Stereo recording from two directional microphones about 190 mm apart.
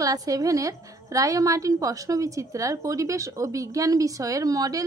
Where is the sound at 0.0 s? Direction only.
20° right (ahead or behind).